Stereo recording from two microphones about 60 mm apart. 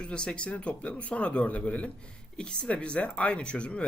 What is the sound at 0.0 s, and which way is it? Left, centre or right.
Speech, centre.